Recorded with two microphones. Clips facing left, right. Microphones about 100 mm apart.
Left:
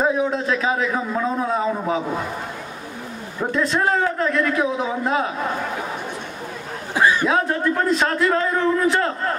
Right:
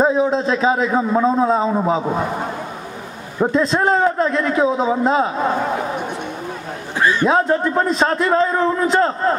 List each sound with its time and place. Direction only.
0.0 s a man's voice: 25° right (ahead or behind)
7.0 s a sound: 15° left (ahead or behind)
7.2 s a man's voice: 25° right (ahead or behind)